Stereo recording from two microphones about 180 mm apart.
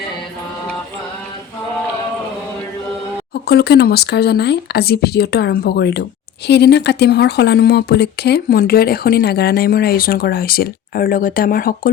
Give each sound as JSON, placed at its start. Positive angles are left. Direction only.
{"t": 3.4, "sound": "speech", "side_deg": 60}